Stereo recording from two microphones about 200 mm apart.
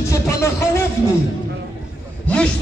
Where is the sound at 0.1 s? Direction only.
15° left (ahead or behind).